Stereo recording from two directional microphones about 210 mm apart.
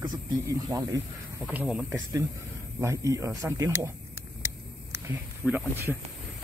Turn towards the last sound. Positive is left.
turn(degrees=-10)  # may be behind; listen again after turning